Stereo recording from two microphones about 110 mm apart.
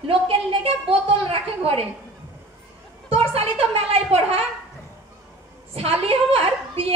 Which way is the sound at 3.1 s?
65° right (ahead or behind).